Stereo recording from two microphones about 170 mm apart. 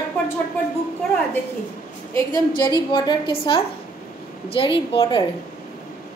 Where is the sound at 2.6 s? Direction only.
25° left (ahead or behind).